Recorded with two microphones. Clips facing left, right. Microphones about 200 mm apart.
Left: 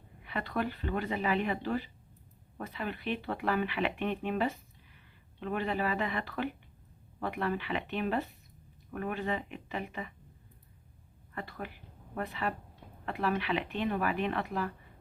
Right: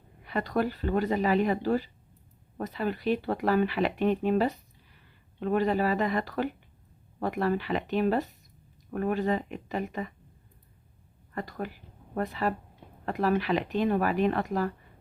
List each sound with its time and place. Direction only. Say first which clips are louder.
0.3 s speech: right 6 dB; 40° right (ahead or behind)
11.3 s speech: right 6 dB; 40° right (ahead or behind)